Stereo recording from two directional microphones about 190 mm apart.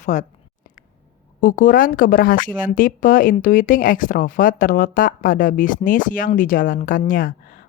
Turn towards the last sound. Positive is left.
turn(degrees=45)  # may be behind; listen again after turning